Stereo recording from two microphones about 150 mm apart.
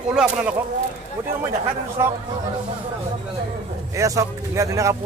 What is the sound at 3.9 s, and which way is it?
Speech, 20° right (ahead or behind).